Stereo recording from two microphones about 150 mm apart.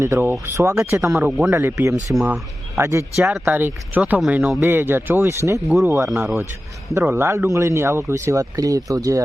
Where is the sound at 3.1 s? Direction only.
10° right (ahead or behind).